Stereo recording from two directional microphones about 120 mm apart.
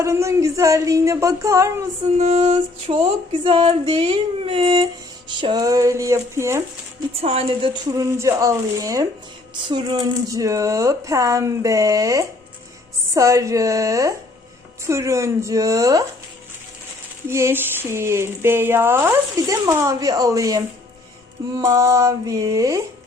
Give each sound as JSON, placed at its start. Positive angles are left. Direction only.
{"t": 0.0, "sound": "speech", "side_deg": -25}
{"t": 2.1, "sound": "female singing", "side_deg": -70}
{"t": 5.3, "sound": "speech", "side_deg": -40}
{"t": 7.2, "sound": "female singing", "side_deg": -55}
{"t": 7.9, "sound": "speech", "side_deg": -25}
{"t": 17.2, "sound": "speech", "side_deg": -20}